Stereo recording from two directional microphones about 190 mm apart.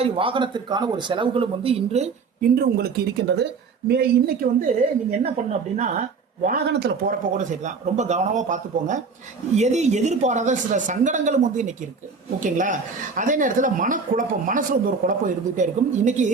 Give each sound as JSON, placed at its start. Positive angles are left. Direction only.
{"t": 0.0, "sound": "a man's voice", "side_deg": -25}
{"t": 2.4, "sound": "speech", "side_deg": -55}
{"t": 5.2, "sound": "speech", "side_deg": -35}
{"t": 6.7, "sound": "speech", "side_deg": -60}
{"t": 7.3, "sound": "speech", "side_deg": -40}